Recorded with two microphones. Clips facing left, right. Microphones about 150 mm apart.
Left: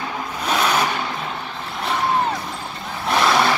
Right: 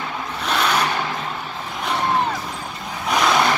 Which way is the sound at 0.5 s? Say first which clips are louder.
Left 1 dB; 10° left (ahead or behind).